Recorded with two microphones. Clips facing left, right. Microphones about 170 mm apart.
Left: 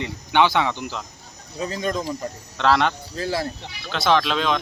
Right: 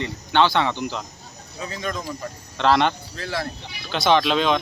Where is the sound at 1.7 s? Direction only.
30° left (ahead or behind).